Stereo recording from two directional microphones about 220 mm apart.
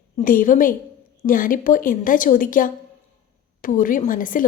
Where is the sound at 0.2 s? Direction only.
40° left (ahead or behind).